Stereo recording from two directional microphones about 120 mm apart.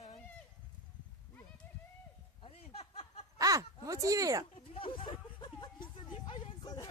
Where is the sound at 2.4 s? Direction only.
55° left (ahead or behind).